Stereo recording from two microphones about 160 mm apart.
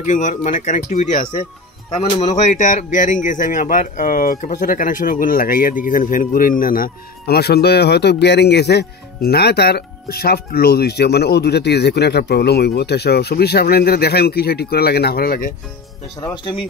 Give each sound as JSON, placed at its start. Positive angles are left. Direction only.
{"t": 0.0, "sound": "speech", "side_deg": 50}